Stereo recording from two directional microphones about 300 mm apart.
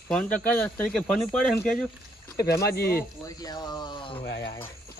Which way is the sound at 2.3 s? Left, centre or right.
Left.